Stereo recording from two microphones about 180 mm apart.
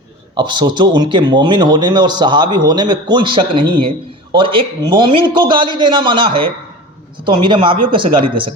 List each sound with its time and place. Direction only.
0.3 s speech: 25° right (ahead or behind)